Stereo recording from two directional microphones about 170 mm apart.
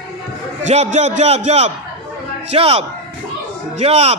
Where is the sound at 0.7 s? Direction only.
40° right (ahead or behind).